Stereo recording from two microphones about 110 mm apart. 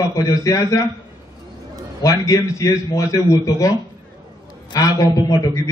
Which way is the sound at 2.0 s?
30° left (ahead or behind).